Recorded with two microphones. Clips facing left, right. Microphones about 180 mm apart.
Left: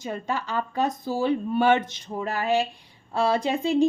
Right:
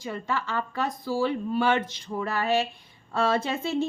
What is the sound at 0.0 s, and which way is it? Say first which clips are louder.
A woman's voice: left 1 dB; 15° left (ahead or behind).